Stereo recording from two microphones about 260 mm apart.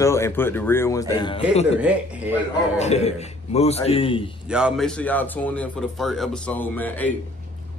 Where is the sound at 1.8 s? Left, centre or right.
Centre.